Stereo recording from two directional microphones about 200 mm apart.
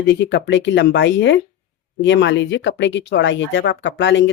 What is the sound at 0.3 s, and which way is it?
Speech, 60° left (ahead or behind).